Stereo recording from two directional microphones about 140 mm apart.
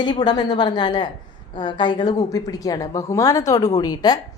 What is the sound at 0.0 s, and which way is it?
A woman's voice, 30° left (ahead or behind).